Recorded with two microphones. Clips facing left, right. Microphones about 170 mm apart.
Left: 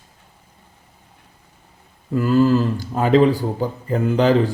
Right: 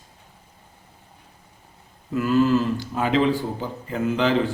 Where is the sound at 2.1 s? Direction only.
35° left (ahead or behind).